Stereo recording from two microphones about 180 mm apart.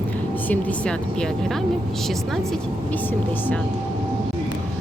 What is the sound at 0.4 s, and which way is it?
Speech, 5° left (ahead or behind).